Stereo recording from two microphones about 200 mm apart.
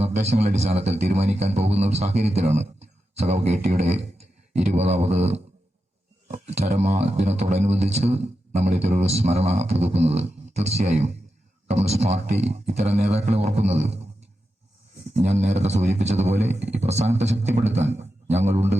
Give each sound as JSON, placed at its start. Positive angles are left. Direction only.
{"t": 0.0, "sound": "speech", "side_deg": -30}
{"t": 15.1, "sound": "speech", "side_deg": -30}